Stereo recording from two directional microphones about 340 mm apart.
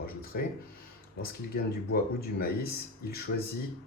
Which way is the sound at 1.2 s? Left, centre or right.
Left.